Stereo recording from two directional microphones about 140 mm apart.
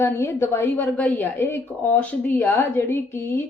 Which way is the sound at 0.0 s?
15° left (ahead or behind).